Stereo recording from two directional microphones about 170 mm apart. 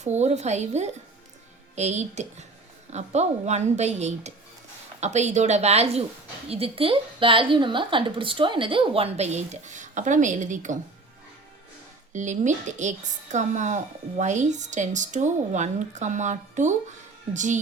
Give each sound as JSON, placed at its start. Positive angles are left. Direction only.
{"t": 0.0, "sound": "a woman's voice", "side_deg": -40}
{"t": 12.1, "sound": "speech", "side_deg": -45}